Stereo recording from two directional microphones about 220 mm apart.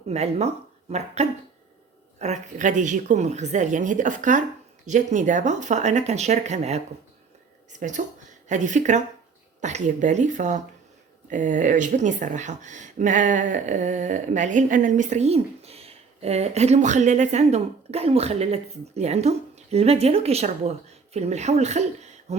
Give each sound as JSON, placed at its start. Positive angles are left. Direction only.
{"t": 0.1, "sound": "speech", "side_deg": -30}